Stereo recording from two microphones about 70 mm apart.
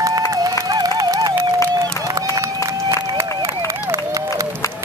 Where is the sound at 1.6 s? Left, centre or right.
Right.